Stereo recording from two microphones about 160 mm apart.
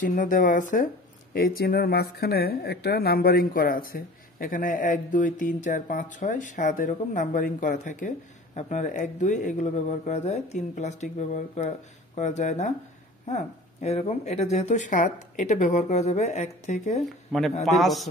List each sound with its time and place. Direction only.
0.0 s a woman's voice: 55° left (ahead or behind)
1.3 s a woman's voice: 70° left (ahead or behind); by 17.0 s 45° left (ahead or behind)
17.3 s a man's voice: centre (ahead or behind)